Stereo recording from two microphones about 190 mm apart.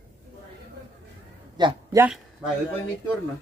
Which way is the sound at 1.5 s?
20° right (ahead or behind).